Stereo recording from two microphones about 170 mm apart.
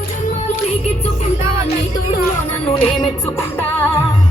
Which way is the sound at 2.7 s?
35° left (ahead or behind).